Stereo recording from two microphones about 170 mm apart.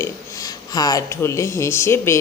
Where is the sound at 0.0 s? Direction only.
20° left (ahead or behind).